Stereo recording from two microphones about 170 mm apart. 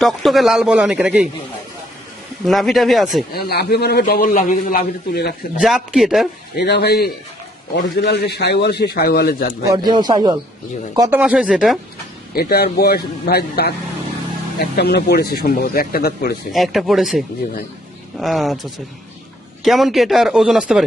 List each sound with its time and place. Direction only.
0.0 s speech: centre (ahead or behind)
2.5 s speech: centre (ahead or behind)
3.3 s a man's voice: 70° left (ahead or behind)
5.5 s speech: centre (ahead or behind)
6.6 s a man's voice: 75° left (ahead or behind)
7.8 s a man's voice: 85° left; by 9.5 s 65° left (ahead or behind)
9.5 s speech: 25° right (ahead or behind)
11.2 s speech: 5° right (ahead or behind)
12.3 s a man's voice: 65° left (ahead or behind)
16.5 s speech: centre (ahead or behind)